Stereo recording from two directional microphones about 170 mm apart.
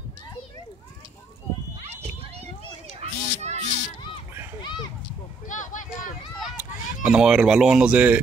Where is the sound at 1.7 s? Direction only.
35° right (ahead or behind).